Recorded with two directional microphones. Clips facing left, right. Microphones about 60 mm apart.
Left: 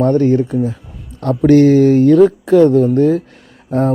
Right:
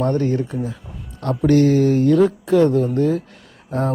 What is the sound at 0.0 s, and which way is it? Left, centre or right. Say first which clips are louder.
Speech: left 7 dB; left.